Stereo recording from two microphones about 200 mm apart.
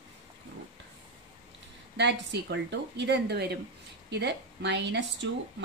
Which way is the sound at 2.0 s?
60° right (ahead or behind).